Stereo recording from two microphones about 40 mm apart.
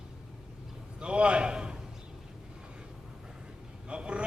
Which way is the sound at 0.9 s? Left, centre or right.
Right.